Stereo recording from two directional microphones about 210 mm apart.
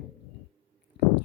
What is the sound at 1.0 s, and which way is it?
Stomach rumble, 55° left (ahead or behind).